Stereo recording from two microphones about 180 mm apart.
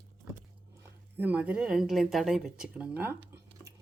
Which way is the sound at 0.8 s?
10° right (ahead or behind).